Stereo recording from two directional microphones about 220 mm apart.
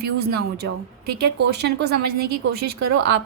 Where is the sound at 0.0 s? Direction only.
45° right (ahead or behind).